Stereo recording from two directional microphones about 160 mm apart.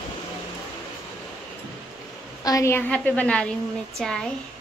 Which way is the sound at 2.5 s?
20° left (ahead or behind).